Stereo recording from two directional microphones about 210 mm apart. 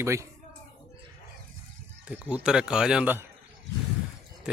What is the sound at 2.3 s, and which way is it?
Speech, 5° right (ahead or behind).